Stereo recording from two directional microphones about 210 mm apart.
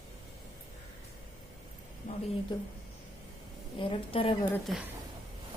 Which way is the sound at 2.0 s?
40° left (ahead or behind).